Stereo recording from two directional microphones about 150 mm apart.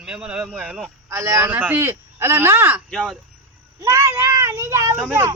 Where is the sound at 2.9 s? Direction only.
5° left (ahead or behind).